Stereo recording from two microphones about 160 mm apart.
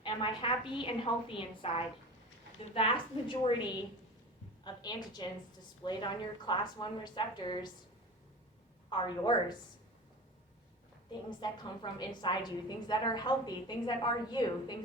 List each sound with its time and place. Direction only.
0.0 s a woman's voice: 30° left (ahead or behind)
8.9 s a woman's voice: 30° left (ahead or behind)
11.1 s a woman's voice: 30° left (ahead or behind)